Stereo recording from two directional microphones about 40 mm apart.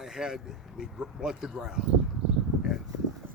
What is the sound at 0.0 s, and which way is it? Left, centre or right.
Speech, centre.